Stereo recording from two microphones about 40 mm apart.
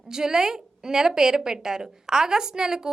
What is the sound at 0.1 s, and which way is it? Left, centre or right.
A woman's voice, centre.